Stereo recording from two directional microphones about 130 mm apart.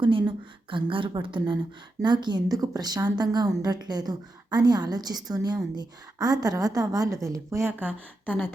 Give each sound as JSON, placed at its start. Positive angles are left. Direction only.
{"t": 0.0, "sound": "a woman's voice", "side_deg": -40}
{"t": 7.7, "sound": "speech", "side_deg": -15}
{"t": 8.3, "sound": "a sound", "side_deg": 15}